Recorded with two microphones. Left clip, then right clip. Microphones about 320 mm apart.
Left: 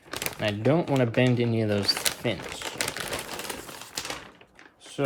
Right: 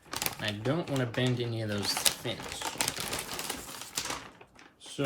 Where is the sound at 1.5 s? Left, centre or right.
Left.